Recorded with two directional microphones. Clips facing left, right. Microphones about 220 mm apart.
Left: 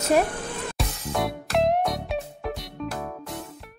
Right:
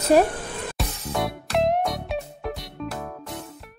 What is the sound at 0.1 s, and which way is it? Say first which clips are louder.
Speech: right 4 dB; 35° right (ahead or behind).